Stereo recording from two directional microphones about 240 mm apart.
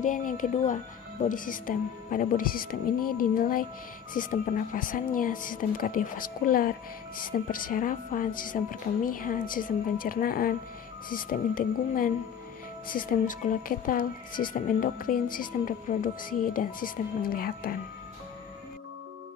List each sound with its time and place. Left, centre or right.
0.0 s a woman's voice: left
3.0 s speech: left
3.3 s a woman's voice: left